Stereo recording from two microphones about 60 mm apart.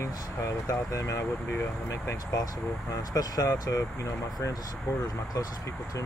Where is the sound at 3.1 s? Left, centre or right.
Left.